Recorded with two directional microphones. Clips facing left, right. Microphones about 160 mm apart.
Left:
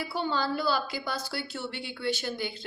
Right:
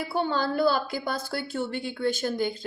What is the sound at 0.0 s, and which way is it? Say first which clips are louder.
Speech: right 3 dB; 55° right (ahead or behind).